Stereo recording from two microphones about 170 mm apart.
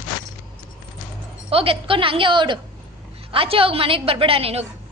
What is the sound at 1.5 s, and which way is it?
A woman's voice, 35° right (ahead or behind).